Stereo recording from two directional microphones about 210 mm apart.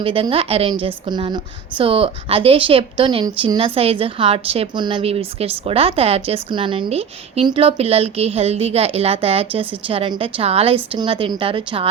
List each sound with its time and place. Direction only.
0.0 s a woman's voice: 25° right (ahead or behind)